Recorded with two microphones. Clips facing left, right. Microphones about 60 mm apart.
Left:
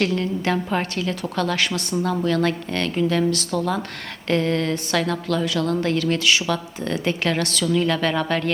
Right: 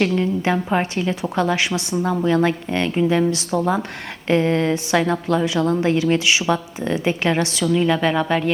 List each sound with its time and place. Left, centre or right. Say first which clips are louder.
0.0 s a woman's voice: right 3 dB; centre